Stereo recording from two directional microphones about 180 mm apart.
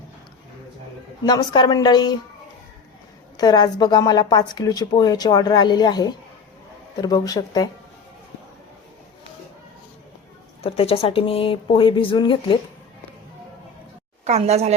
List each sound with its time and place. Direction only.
1.2 s a woman's voice: 20° left (ahead or behind)
3.3 s a woman's voice: 25° left (ahead or behind)
10.6 s speech: 30° left (ahead or behind)
14.3 s a woman's voice: 35° right (ahead or behind)